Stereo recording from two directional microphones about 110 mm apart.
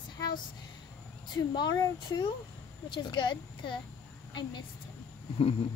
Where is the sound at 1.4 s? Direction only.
40° left (ahead or behind).